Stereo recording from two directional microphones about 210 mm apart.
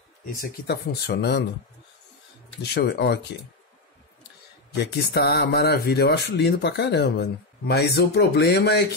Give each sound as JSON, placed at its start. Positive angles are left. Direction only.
{"t": 0.4, "sound": "speech", "side_deg": 50}
{"t": 2.7, "sound": "speech", "side_deg": 55}
{"t": 4.7, "sound": "speech", "side_deg": 50}